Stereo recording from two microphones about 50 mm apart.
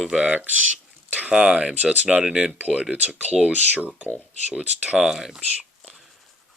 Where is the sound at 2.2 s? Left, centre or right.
Centre.